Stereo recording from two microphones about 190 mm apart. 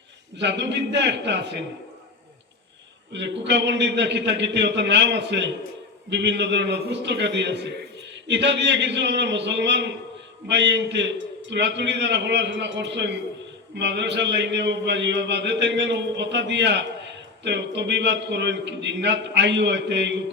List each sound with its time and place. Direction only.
0.4 s a man's voice: 65° right (ahead or behind)
3.1 s a man's voice: 65° right (ahead or behind)